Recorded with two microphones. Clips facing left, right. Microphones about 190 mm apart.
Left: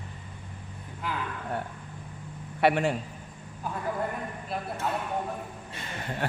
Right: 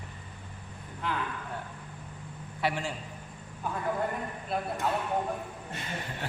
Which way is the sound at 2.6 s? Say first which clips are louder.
Left 8 dB; 60° left (ahead or behind).